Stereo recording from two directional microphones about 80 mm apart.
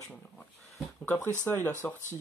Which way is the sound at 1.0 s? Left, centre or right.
Left.